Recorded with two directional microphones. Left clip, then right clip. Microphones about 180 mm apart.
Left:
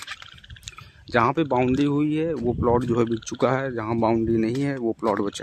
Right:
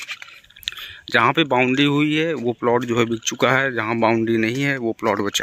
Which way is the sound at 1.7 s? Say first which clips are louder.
Right 5 dB; centre (ahead or behind).